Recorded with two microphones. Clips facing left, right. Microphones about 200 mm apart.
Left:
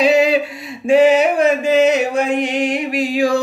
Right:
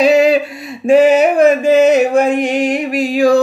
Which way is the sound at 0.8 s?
45° right (ahead or behind).